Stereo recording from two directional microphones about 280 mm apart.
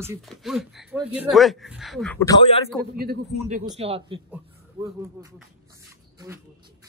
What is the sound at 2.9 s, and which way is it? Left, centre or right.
Speech, right.